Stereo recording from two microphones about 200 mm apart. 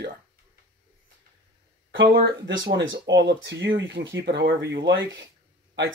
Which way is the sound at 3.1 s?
60° right (ahead or behind).